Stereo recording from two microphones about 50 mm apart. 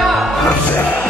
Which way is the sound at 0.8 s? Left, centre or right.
Left.